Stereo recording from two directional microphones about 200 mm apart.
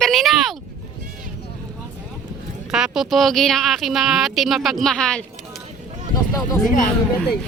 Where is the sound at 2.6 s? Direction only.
5° right (ahead or behind).